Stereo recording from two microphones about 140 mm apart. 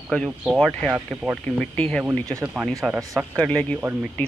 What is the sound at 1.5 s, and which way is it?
Speech, 10° left (ahead or behind).